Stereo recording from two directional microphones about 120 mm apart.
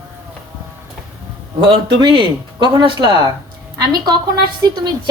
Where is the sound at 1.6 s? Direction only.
45° right (ahead or behind).